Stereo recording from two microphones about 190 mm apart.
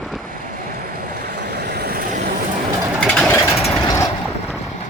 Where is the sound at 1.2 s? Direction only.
60° right (ahead or behind).